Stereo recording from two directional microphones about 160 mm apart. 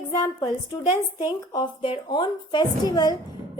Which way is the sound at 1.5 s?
30° left (ahead or behind).